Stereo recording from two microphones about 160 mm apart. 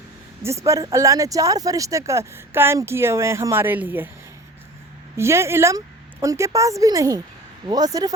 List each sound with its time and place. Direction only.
0.4 s speech: 20° right (ahead or behind)
5.1 s speech: 15° right (ahead or behind)